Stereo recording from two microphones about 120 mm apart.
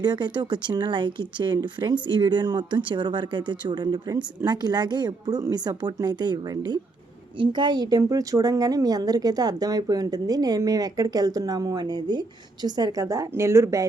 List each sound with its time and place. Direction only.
0.0 s a woman's voice: 40° right (ahead or behind)